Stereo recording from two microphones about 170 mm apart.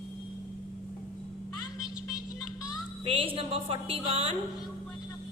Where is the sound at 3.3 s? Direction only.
35° right (ahead or behind).